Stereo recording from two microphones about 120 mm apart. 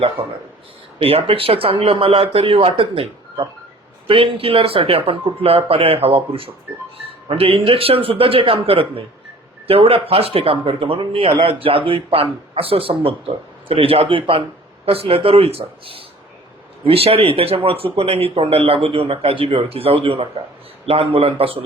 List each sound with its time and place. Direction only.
0.9 s speech: 55° right (ahead or behind)